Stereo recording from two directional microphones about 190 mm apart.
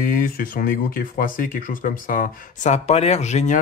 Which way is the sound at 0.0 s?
50° left (ahead or behind).